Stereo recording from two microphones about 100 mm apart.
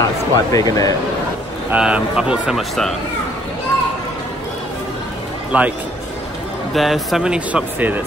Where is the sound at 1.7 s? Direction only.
10° right (ahead or behind).